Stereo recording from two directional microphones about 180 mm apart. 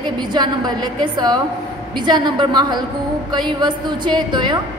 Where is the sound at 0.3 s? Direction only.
25° right (ahead or behind).